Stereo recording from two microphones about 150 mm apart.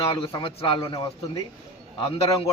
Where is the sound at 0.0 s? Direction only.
40° left (ahead or behind).